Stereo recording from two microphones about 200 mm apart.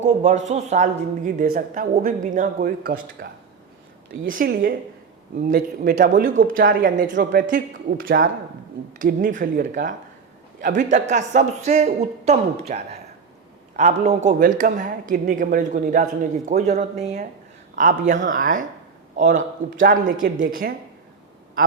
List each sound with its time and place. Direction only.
0.0 s a man's voice: 35° right (ahead or behind)
4.3 s speech: 50° right (ahead or behind)
9.0 s a man's voice: 40° right (ahead or behind)
14.3 s a man's voice: 45° right (ahead or behind)